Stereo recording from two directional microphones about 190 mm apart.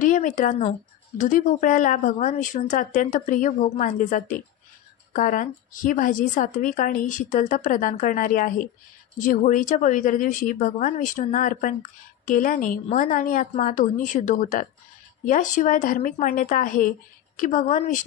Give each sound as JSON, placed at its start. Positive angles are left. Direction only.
{"t": 0.0, "sound": "speech", "side_deg": 45}